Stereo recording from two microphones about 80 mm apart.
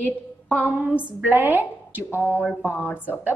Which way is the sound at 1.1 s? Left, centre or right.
Right.